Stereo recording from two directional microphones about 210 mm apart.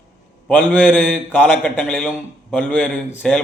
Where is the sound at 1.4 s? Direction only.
5° right (ahead or behind).